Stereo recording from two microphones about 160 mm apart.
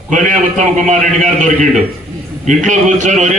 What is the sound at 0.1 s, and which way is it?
A man's voice, 55° right (ahead or behind).